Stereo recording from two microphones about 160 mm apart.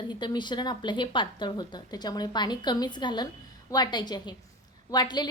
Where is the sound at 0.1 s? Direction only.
30° left (ahead or behind).